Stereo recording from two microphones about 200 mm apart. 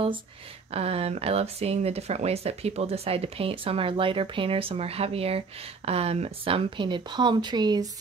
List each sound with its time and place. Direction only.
0.7 s speech: 30° right (ahead or behind)